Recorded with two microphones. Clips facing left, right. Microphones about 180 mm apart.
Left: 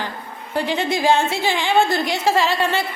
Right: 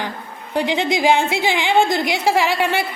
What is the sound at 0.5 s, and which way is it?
A woman's voice, 15° right (ahead or behind).